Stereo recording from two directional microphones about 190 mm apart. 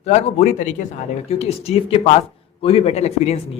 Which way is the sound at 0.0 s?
35° left (ahead or behind).